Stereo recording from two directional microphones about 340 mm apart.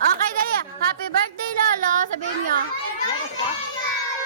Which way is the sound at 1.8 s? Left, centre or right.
Right.